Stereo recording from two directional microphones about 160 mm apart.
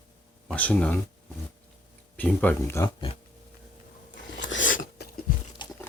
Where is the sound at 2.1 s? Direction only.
10° left (ahead or behind).